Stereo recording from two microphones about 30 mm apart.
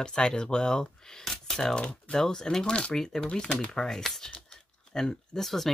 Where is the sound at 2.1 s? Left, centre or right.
Left.